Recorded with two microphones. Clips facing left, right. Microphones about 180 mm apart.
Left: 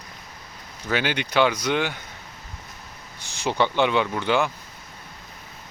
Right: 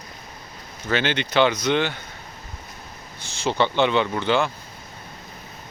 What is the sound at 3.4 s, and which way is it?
Speech, 15° left (ahead or behind).